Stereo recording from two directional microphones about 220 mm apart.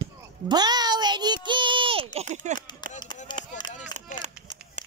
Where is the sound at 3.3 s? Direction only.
20° left (ahead or behind).